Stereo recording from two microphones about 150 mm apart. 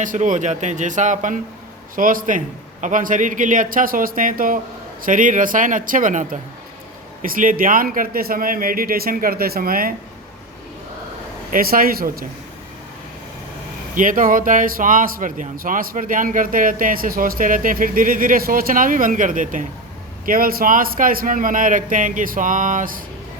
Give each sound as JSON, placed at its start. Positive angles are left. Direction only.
{"t": 0.0, "sound": "a man's voice", "side_deg": -60}
{"t": 11.5, "sound": "a man's voice", "side_deg": -75}
{"t": 13.9, "sound": "a man's voice", "side_deg": -65}